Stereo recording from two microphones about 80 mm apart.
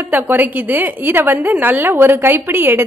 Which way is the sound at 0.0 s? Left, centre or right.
Right.